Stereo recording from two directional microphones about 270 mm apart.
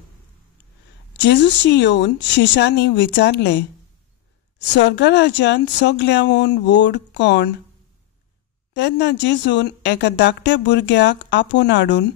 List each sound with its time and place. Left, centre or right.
1.1 s a woman's voice: left
8.7 s a woman's voice: left